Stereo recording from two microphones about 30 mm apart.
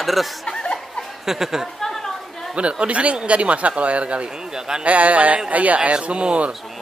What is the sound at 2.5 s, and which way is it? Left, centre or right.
A man's voice, right.